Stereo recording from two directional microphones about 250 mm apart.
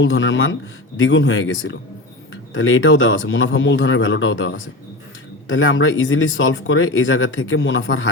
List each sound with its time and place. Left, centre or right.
0.0 s speech: left